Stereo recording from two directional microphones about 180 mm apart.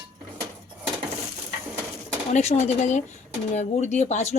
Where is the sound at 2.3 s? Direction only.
40° left (ahead or behind).